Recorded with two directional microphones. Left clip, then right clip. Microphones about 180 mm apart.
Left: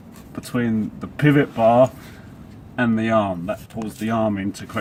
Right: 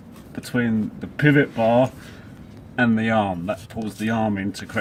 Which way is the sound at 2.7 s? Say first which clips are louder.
Left 1 dB; 15° right (ahead or behind).